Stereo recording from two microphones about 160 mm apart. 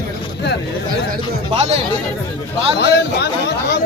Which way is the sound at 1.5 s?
40° right (ahead or behind).